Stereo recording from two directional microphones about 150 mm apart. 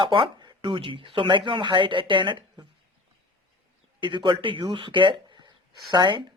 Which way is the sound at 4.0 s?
30° right (ahead or behind).